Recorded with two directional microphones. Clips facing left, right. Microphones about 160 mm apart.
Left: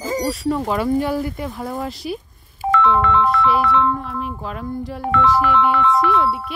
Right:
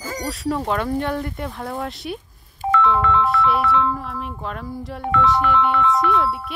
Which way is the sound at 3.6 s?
65° left (ahead or behind).